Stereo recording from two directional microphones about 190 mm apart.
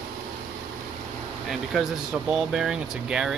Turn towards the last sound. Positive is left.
turn(degrees=-5)  # may be behind; listen again after turning